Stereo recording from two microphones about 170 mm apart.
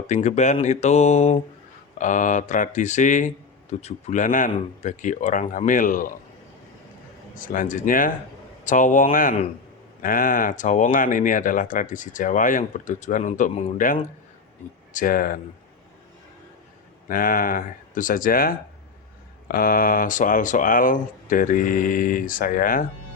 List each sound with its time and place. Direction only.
0.1 s speech: 45° left (ahead or behind)
7.3 s speech: 50° left (ahead or behind)
17.1 s speech: 55° left (ahead or behind)